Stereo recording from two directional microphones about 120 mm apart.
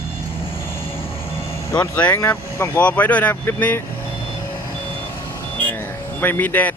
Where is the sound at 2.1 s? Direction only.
25° left (ahead or behind).